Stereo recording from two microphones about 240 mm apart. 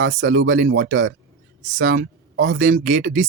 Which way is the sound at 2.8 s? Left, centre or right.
Right.